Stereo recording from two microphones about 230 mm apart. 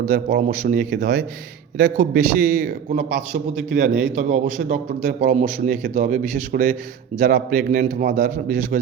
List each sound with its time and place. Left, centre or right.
0.1 s a man's voice: right